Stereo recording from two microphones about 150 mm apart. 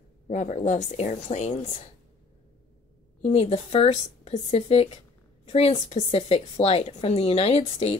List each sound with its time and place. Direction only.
0.3 s speech: 55° left (ahead or behind)
1.5 s a woman's voice: 35° left (ahead or behind)
3.3 s speech: 45° left (ahead or behind)